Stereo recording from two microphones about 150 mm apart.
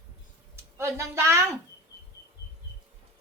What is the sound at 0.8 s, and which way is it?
Speech, 20° right (ahead or behind).